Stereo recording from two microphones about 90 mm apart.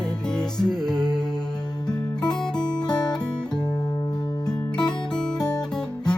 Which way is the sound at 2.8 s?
50° left (ahead or behind).